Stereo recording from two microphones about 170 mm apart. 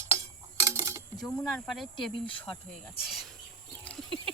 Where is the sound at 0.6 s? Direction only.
20° right (ahead or behind).